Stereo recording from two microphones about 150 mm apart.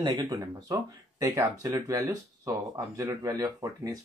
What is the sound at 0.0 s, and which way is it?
Speech, 30° right (ahead or behind).